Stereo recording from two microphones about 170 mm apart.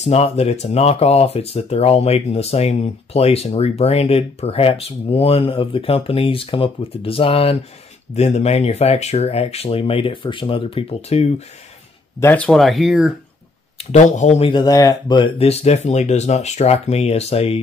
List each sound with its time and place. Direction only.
0.0 s speech: 40° left (ahead or behind)
12.2 s speech: 10° left (ahead or behind)
13.7 s speech: 45° left (ahead or behind)
14.5 s speech: 20° left (ahead or behind)